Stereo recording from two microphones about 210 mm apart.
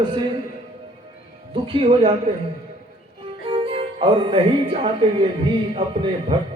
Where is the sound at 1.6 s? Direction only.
25° right (ahead or behind).